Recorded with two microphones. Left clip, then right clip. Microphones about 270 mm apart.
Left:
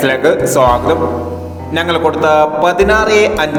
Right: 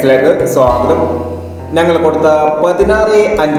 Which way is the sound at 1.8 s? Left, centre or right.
Left.